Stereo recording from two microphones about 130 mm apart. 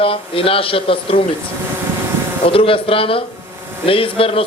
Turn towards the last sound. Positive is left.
turn(degrees=45)  # may be behind; listen again after turning